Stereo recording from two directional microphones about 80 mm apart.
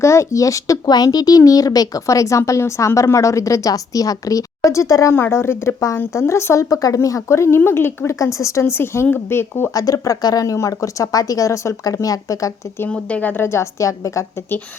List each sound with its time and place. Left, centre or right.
0.0 s speech: left
5.1 s speech: left
8.2 s speech: left
9.7 s speech: left
12.9 s speech: centre; by 14.3 s left